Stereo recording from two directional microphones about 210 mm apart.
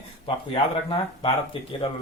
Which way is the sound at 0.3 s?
25° left (ahead or behind).